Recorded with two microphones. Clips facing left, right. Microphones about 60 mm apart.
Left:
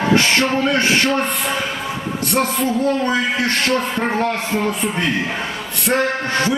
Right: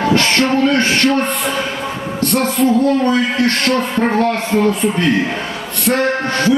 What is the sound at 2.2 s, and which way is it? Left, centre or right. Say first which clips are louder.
Music: right 3 dB; centre.